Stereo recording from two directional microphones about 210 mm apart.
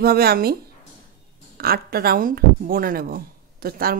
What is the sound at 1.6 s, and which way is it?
Speech, 45° right (ahead or behind).